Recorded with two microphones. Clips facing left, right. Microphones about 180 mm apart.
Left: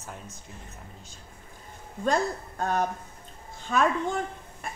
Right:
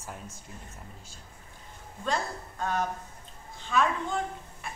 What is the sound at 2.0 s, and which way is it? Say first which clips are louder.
A woman's voice: left 6 dB; 45° left (ahead or behind).